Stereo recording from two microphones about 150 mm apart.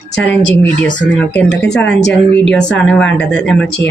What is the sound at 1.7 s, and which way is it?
A woman's voice, 5° left (ahead or behind).